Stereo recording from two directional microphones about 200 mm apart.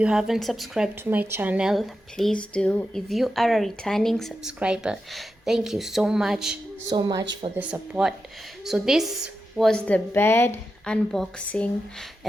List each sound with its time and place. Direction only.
0.0 s a woman's voice: 5° right (ahead or behind)
6.9 s speech: 20° right (ahead or behind)
7.6 s a woman's voice: 5° right (ahead or behind)